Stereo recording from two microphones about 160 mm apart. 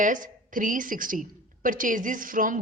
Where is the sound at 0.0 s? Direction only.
55° right (ahead or behind).